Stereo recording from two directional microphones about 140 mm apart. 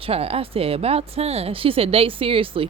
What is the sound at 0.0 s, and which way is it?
Speech, 45° right (ahead or behind).